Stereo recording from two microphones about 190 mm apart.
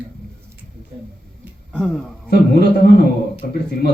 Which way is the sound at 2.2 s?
55° left (ahead or behind).